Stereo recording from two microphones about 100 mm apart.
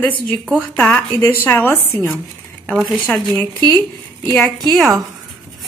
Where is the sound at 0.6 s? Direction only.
15° left (ahead or behind).